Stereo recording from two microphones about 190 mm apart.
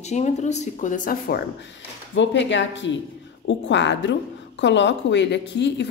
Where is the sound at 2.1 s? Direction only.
75° left (ahead or behind).